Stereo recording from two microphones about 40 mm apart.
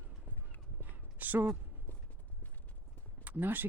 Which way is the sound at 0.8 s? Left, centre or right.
Right.